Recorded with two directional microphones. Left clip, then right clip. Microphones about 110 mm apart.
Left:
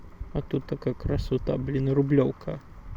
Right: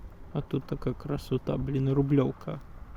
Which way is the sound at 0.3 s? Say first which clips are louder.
Left 3 dB; 20° right (ahead or behind).